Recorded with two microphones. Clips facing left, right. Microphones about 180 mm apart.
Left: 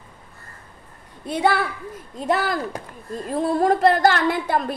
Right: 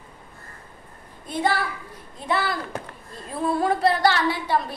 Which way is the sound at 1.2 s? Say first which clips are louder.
Left 4 dB; 70° left (ahead or behind).